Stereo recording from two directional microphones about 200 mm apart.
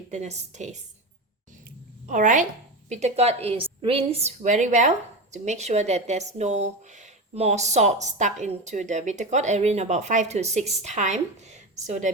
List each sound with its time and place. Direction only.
0.1 s speech: 35° right (ahead or behind)
2.0 s speech: 40° right (ahead or behind)